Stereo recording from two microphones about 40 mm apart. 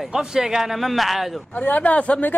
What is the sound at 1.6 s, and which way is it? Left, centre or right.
Speech, left.